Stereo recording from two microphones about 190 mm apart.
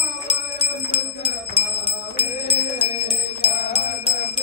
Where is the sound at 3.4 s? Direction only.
30° left (ahead or behind).